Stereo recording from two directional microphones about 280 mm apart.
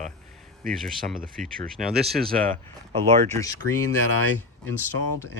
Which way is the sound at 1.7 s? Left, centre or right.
Centre.